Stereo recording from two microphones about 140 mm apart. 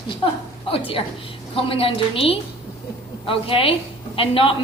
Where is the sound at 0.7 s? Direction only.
40° left (ahead or behind).